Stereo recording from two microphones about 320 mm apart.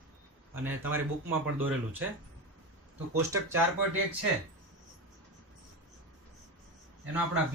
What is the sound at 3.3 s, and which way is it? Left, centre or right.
Speech, centre.